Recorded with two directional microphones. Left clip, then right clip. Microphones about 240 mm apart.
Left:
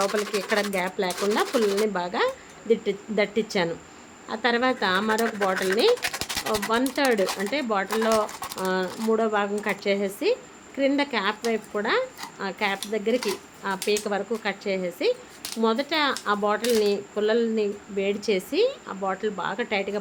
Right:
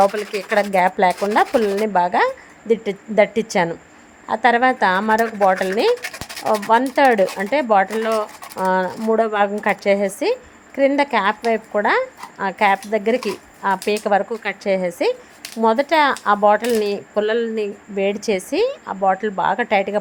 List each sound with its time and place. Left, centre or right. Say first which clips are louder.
0.0 s speech: right 8 dB; centre